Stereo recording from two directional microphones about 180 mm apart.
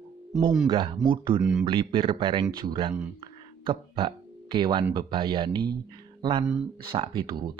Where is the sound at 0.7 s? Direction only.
25° right (ahead or behind).